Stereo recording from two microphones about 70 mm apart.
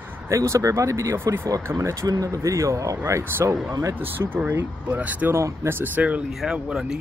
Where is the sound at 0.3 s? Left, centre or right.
Right.